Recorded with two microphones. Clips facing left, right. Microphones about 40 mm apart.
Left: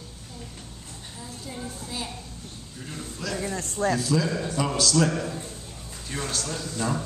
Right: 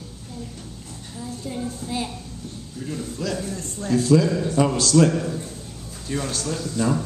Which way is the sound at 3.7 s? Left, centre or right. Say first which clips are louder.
Right 2 dB; left.